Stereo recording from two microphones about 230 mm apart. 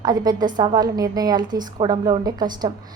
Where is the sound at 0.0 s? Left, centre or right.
Centre.